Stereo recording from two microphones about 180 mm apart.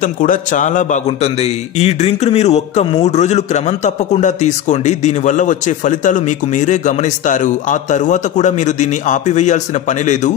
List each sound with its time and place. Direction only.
0.0 s a man's voice: 50° left (ahead or behind)